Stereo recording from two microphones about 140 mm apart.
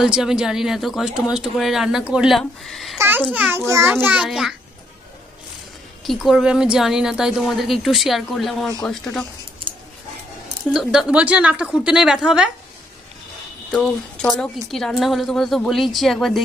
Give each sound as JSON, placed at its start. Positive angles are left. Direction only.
{"t": 0.0, "sound": "speech", "side_deg": -5}
{"t": 3.0, "sound": "a child's voice", "side_deg": -15}
{"t": 6.0, "sound": "speech", "side_deg": 0}
{"t": 10.7, "sound": "speech", "side_deg": -5}
{"t": 13.7, "sound": "speech", "side_deg": 0}